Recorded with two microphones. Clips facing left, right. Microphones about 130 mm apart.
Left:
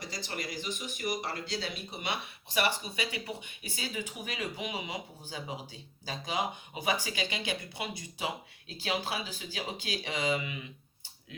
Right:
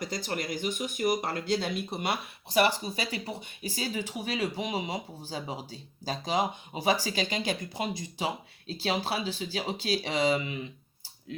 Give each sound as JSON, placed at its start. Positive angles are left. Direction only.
{"t": 0.0, "sound": "speech", "side_deg": -50}